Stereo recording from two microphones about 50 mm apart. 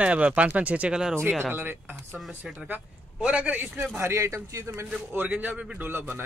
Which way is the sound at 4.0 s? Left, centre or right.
Right.